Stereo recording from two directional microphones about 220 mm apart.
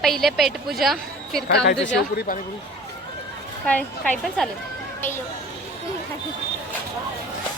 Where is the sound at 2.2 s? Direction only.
40° left (ahead or behind).